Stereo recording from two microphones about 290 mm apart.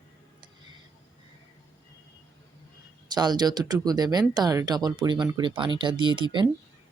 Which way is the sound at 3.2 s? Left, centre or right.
Centre.